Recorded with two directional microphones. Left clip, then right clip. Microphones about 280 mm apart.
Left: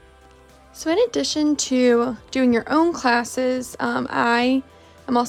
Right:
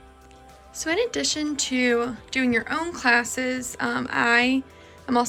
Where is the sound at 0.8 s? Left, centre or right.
Centre.